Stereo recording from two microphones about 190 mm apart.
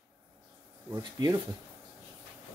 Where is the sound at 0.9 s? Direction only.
20° right (ahead or behind).